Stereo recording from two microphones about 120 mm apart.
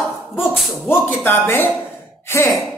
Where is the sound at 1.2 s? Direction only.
20° left (ahead or behind).